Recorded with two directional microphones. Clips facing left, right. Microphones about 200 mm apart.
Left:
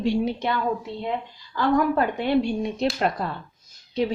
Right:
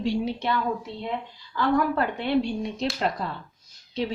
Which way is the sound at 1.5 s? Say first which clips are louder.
Left 2 dB; 45° left (ahead or behind).